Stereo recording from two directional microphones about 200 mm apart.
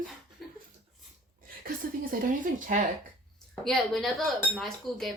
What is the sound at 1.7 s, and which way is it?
A woman's voice, 45° right (ahead or behind).